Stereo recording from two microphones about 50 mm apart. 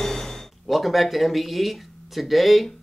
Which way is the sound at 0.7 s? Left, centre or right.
Centre.